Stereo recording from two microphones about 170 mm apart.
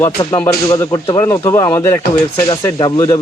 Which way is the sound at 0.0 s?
25° left (ahead or behind).